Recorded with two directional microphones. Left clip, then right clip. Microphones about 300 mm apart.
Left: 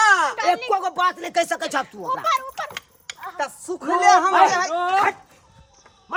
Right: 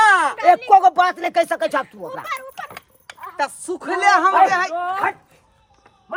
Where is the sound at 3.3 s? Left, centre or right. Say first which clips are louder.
Right 5 dB; right.